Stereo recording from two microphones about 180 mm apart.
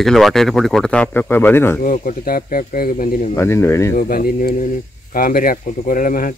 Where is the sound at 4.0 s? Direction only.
55° left (ahead or behind).